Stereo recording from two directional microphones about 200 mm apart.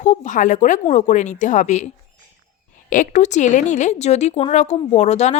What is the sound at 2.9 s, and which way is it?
Speech, 40° left (ahead or behind).